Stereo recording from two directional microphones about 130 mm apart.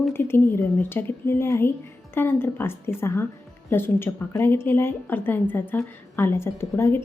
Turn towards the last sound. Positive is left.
turn(degrees=20)  # may be behind; listen again after turning